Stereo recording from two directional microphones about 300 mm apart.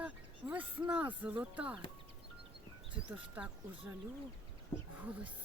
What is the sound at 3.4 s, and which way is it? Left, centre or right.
Speech, centre.